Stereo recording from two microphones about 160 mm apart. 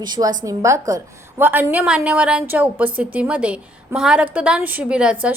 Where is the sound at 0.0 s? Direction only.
25° right (ahead or behind).